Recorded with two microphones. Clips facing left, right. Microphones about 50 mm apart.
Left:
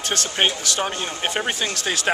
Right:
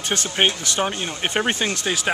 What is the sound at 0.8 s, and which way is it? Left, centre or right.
Speech, centre.